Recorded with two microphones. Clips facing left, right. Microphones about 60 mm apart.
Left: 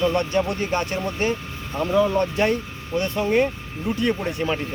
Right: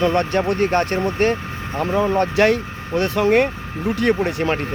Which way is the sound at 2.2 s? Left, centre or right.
Right.